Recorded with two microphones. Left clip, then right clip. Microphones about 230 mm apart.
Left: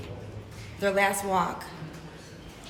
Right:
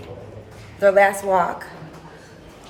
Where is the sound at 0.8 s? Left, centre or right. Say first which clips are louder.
Right 10 dB; centre.